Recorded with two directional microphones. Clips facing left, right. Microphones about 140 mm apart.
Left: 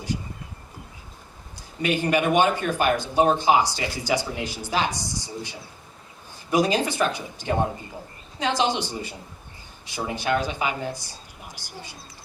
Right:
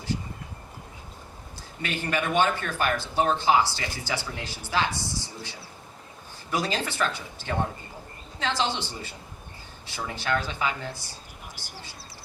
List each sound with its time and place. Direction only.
1.8 s speech: 15° left (ahead or behind)